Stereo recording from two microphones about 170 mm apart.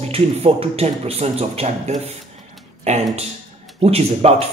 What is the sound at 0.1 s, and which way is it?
A man's voice, 35° right (ahead or behind).